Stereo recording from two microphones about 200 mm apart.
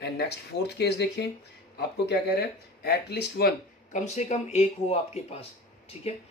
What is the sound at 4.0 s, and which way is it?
Speech, 35° left (ahead or behind).